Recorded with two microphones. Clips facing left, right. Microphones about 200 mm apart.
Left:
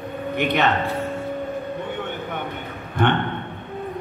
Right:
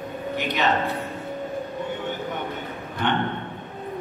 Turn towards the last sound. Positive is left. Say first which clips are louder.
# left 5 dB
turn(degrees=60)  # may be behind; listen again after turning